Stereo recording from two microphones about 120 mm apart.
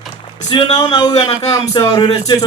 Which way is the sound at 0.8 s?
30° left (ahead or behind).